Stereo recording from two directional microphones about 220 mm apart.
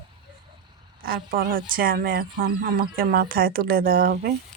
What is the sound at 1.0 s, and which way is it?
Speech, 40° right (ahead or behind).